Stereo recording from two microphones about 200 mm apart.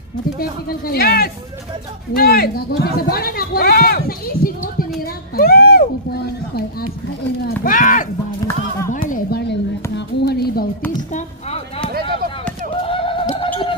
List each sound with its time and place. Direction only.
0.4 s speech: 50° left (ahead or behind)
5.3 s a sound: 50° left (ahead or behind)
7.4 s speech: 45° left (ahead or behind)
8.4 s music: 15° left (ahead or behind)
9.1 s a sound: 55° left (ahead or behind)
12.8 s horse: 25° left (ahead or behind)